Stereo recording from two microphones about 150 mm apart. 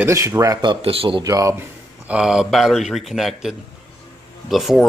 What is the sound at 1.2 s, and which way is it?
Speech, 20° right (ahead or behind).